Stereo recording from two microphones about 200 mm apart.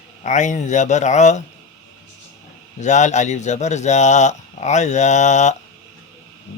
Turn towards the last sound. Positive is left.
turn(degrees=35)  # may be behind; listen again after turning